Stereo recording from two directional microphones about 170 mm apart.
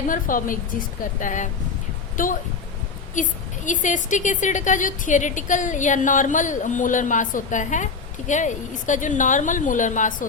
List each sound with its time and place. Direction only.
0.1 s a woman's voice: 55° left (ahead or behind)